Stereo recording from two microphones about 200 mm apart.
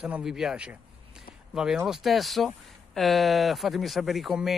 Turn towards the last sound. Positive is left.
turn(degrees=0)  # may be behind; listen again after turning